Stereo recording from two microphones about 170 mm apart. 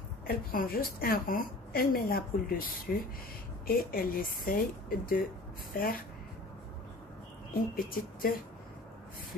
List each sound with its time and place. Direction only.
0.3 s a woman's voice: 60° left (ahead or behind)
7.7 s a woman's voice: 60° left (ahead or behind)